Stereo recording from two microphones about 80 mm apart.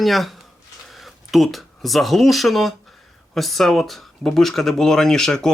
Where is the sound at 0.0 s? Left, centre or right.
Centre.